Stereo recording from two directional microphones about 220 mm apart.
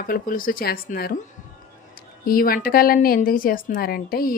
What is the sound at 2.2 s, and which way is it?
A woman's voice, 40° left (ahead or behind).